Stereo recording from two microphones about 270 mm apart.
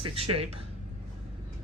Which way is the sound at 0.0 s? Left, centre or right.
Right.